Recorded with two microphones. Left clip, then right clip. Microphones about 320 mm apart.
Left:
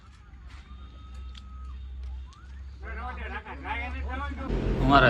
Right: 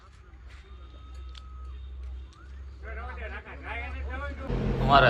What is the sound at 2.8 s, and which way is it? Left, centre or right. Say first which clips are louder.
Vehicle: left 2 dB; centre.